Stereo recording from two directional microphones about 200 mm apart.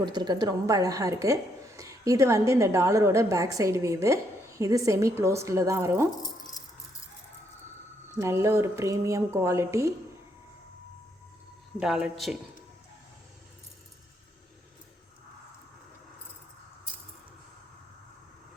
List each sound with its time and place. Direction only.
0.0 s a woman's voice: 20° right (ahead or behind)
6.2 s keys jangling: 20° left (ahead or behind)
8.2 s a woman's voice: 15° right (ahead or behind)
11.8 s speech: 5° right (ahead or behind)